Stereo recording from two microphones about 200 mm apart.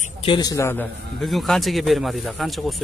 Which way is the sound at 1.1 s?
Centre (ahead or behind).